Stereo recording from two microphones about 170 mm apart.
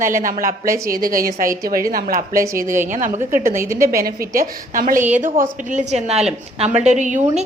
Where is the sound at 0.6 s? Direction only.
15° right (ahead or behind).